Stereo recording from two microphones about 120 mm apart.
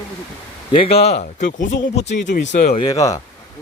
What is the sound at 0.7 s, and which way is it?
Speech, 55° left (ahead or behind).